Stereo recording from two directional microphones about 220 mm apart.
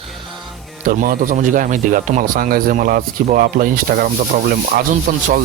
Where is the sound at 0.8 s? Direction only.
40° right (ahead or behind).